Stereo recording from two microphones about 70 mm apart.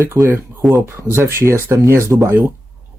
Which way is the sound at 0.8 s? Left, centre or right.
Right.